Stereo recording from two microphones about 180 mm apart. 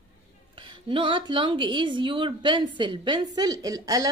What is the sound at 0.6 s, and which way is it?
A woman's voice, 25° right (ahead or behind).